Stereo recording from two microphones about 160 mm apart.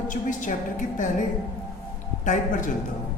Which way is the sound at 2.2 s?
50° left (ahead or behind).